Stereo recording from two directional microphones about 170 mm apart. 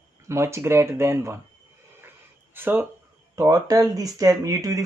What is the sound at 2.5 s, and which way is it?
Speech, 10° right (ahead or behind).